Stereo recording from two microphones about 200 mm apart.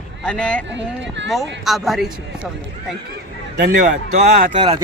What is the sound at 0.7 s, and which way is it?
Speech, 65° right (ahead or behind).